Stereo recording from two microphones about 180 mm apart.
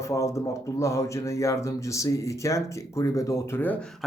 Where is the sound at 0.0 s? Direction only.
15° left (ahead or behind).